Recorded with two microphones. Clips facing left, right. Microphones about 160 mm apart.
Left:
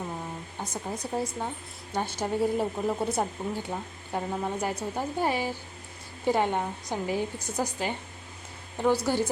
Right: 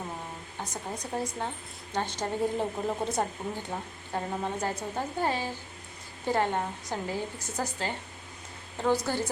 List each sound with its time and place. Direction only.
0.6 s speech: 10° left (ahead or behind)